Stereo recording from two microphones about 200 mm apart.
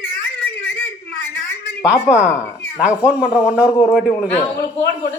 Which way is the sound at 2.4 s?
15° left (ahead or behind).